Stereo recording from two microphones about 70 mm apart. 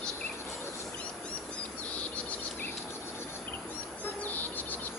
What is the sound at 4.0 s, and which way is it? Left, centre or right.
Bird, left.